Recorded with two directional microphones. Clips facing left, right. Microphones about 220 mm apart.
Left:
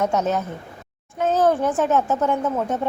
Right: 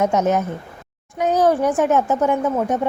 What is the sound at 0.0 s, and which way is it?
A woman's voice, 20° right (ahead or behind).